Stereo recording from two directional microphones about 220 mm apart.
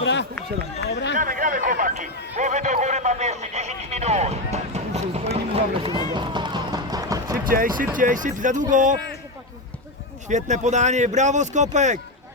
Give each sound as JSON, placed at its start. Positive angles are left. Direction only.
{"t": 0.0, "sound": "run", "side_deg": 55}
{"t": 0.9, "sound": "speech", "side_deg": 55}
{"t": 1.1, "sound": "a sound", "side_deg": -35}
{"t": 7.9, "sound": "speech", "side_deg": -35}
{"t": 10.2, "sound": "speech", "side_deg": -35}